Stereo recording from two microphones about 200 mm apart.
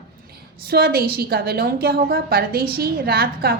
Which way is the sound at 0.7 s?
50° right (ahead or behind).